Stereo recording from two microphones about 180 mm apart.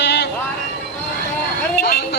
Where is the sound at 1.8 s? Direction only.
65° left (ahead or behind).